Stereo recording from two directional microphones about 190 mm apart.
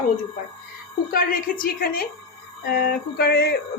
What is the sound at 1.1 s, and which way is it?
Speech, 50° left (ahead or behind).